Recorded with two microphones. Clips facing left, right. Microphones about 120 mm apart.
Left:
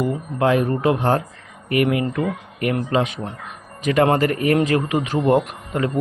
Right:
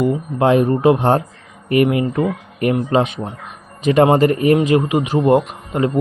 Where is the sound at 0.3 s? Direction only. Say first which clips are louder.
Right 4 dB; 25° right (ahead or behind).